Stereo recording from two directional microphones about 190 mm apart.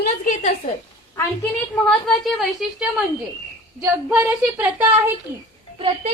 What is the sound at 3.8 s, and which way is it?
A woman's voice, 10° right (ahead or behind).